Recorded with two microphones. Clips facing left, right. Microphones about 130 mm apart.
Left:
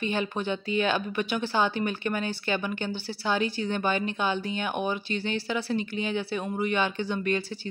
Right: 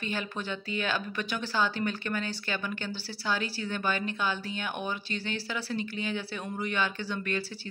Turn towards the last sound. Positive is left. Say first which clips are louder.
# left 5 dB
turn(degrees=20)  # may be behind; listen again after turning